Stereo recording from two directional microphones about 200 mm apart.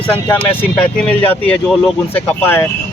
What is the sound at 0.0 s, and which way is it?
Speech, 10° left (ahead or behind).